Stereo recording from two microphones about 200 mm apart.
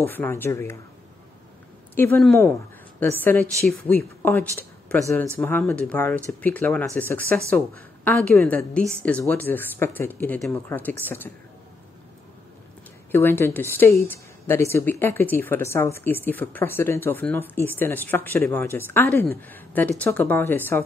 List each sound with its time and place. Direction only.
0.0 s a woman's voice: 10° left (ahead or behind)
2.0 s a woman's voice: 5° left (ahead or behind)
13.1 s a woman's voice: 10° left (ahead or behind)